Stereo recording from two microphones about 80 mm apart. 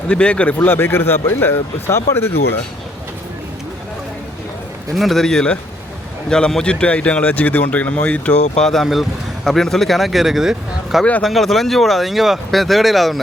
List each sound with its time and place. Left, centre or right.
0.1 s a man's voice: centre; by 2.3 s left
4.9 s speech: centre